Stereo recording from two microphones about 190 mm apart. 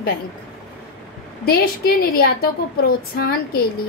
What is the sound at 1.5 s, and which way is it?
Speech, 55° left (ahead or behind).